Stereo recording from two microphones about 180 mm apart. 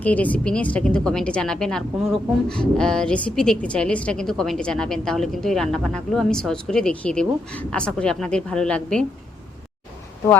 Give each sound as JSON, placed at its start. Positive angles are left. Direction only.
{"t": 0.0, "sound": "speech", "side_deg": 10}